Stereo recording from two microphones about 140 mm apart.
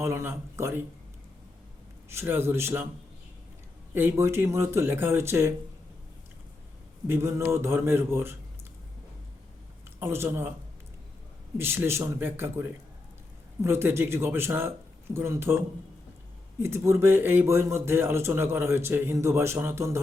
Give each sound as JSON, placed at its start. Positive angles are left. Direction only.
{"t": 0.0, "sound": "speech", "side_deg": -20}
{"t": 2.0, "sound": "speech", "side_deg": -15}
{"t": 3.9, "sound": "speech", "side_deg": -15}
{"t": 7.1, "sound": "speech", "side_deg": -20}
{"t": 10.0, "sound": "speech", "side_deg": -15}
{"t": 11.5, "sound": "speech", "side_deg": -15}
{"t": 16.6, "sound": "speech", "side_deg": -20}